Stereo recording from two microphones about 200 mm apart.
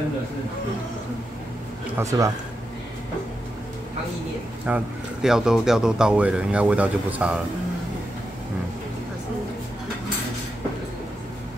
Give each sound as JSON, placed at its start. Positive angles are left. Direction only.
{"t": 2.0, "sound": "speech", "side_deg": -15}
{"t": 4.6, "sound": "speech", "side_deg": -5}